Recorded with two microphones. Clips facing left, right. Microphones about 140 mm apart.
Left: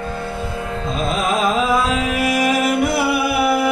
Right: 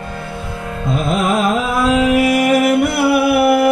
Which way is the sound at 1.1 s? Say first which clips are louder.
Right 3 dB; 60° right (ahead or behind).